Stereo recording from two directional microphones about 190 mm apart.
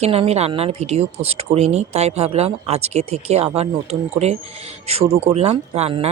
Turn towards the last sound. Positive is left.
turn(degrees=-35)  # may be behind; listen again after turning